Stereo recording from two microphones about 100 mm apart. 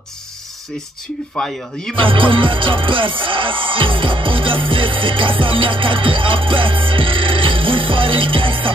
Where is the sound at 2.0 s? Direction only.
60° right (ahead or behind).